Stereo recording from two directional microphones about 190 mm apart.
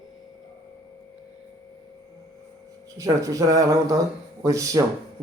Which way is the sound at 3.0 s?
15° right (ahead or behind).